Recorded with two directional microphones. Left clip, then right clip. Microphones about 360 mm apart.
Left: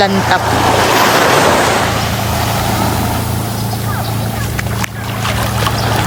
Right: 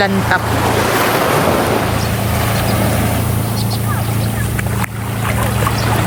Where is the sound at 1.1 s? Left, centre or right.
Left.